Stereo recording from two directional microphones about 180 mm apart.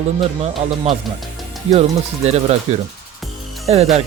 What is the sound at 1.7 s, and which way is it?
Speech, 35° right (ahead or behind).